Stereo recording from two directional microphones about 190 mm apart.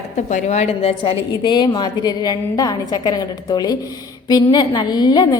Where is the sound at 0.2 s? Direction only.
40° left (ahead or behind).